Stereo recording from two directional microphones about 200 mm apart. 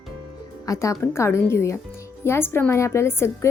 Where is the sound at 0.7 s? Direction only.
15° left (ahead or behind).